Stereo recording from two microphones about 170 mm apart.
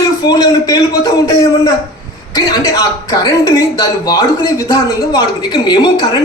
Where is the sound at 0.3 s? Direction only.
20° left (ahead or behind).